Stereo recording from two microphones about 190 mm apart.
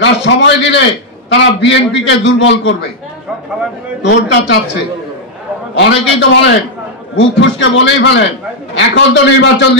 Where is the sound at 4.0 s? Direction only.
65° left (ahead or behind).